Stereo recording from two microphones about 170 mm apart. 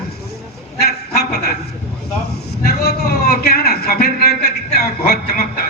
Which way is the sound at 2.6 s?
65° left (ahead or behind).